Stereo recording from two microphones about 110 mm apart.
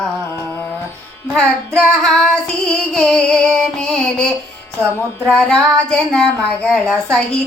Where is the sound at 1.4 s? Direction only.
5° left (ahead or behind).